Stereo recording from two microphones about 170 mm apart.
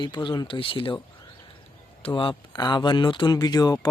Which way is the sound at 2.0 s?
30° left (ahead or behind).